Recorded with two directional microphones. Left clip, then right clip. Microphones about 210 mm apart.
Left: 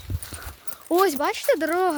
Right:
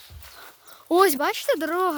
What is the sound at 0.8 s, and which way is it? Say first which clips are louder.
Speech: right 2 dB; 15° right (ahead or behind).